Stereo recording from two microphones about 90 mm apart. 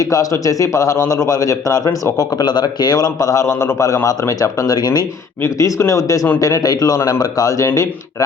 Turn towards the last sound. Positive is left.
turn(degrees=40)  # may be behind; listen again after turning